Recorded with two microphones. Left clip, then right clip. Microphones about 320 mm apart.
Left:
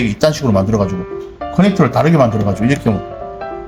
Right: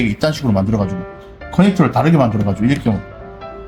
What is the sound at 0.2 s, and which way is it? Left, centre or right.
Speech, centre.